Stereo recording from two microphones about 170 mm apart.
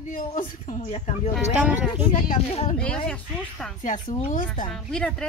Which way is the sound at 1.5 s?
10° right (ahead or behind).